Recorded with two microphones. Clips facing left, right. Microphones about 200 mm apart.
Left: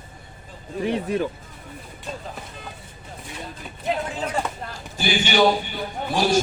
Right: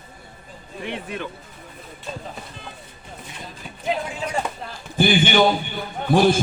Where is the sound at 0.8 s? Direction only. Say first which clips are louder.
Left 7 dB; 40° left (ahead or behind).